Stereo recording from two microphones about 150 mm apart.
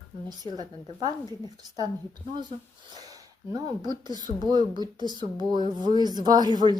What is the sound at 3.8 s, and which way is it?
A woman's voice, 25° right (ahead or behind).